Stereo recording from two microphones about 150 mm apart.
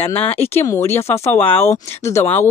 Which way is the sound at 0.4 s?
15° left (ahead or behind).